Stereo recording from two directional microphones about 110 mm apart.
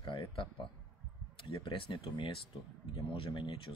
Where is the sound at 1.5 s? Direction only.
50° left (ahead or behind).